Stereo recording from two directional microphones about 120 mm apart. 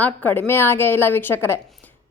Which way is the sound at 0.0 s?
15° left (ahead or behind).